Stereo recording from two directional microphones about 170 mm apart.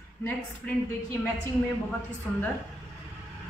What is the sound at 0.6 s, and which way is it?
Speech, 5° left (ahead or behind).